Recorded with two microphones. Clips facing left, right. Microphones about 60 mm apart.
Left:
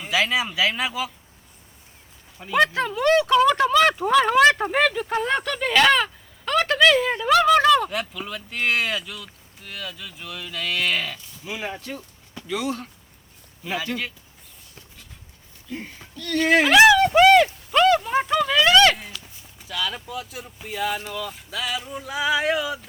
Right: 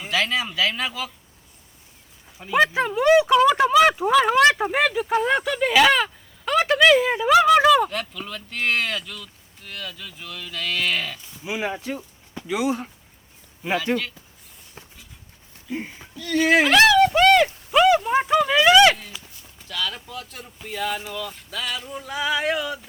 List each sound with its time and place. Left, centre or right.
0.1 s speech: centre
2.5 s speech: centre
7.9 s speech: centre
11.4 s speech: centre
15.7 s speech: centre
17.4 s a sound: centre
19.2 s speech: centre